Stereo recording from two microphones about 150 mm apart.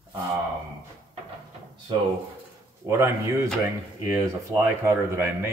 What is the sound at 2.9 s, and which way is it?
Speech, 20° right (ahead or behind).